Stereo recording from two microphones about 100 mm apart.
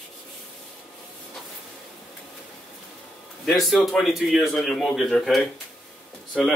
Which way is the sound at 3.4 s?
5° left (ahead or behind).